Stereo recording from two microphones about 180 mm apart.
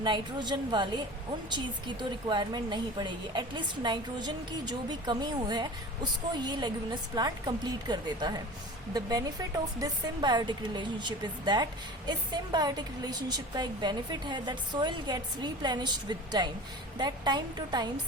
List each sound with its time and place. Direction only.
0.0 s speech: 25° right (ahead or behind)